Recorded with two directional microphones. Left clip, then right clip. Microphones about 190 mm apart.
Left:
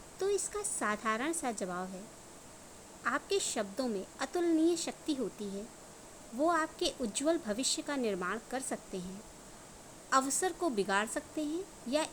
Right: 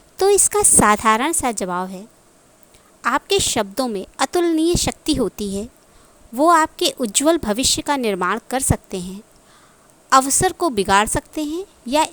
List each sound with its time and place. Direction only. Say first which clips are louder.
0.2 s a woman's voice: right 18 dB; 55° right (ahead or behind)
3.0 s a woman's voice: right 15 dB; 50° right (ahead or behind)
10.1 s a woman's voice: right 16 dB; 50° right (ahead or behind)